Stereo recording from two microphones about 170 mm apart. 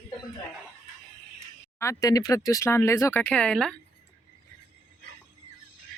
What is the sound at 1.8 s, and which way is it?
Speech, 20° left (ahead or behind).